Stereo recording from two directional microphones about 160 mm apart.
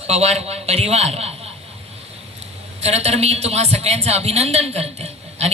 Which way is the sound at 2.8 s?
40° right (ahead or behind).